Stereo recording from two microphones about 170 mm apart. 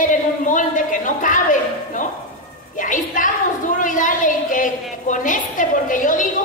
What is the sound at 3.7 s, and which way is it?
A woman's voice, 50° left (ahead or behind).